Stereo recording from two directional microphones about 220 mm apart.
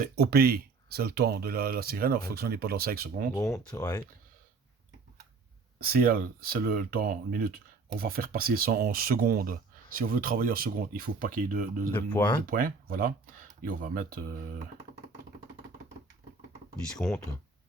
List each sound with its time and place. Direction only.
0.0 s speech: 45° right (ahead or behind)
3.3 s speech: 15° left (ahead or behind)
5.8 s speech: 40° right (ahead or behind)
11.9 s speech: 10° left (ahead or behind)
12.5 s speech: 40° right (ahead or behind)
17.0 s speech: 10° left (ahead or behind)